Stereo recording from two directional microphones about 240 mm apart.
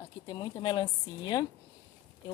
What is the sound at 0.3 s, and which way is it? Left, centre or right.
Speech, centre.